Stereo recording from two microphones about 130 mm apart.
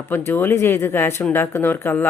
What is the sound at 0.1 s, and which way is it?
Speech, 15° left (ahead or behind).